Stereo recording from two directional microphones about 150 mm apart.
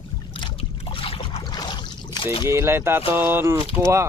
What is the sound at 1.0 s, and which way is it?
Boat, 35° left (ahead or behind).